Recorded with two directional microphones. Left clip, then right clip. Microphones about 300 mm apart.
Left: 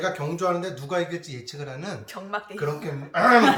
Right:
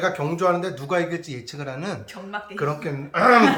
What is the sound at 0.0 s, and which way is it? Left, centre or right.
A man's voice, centre.